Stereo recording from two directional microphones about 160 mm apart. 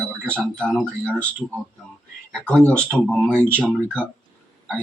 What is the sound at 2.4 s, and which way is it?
Speech, 5° left (ahead or behind).